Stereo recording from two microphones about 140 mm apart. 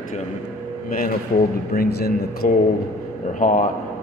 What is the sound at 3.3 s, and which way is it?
Speech, 65° left (ahead or behind).